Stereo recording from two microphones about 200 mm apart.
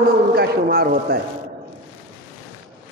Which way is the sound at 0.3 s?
50° right (ahead or behind).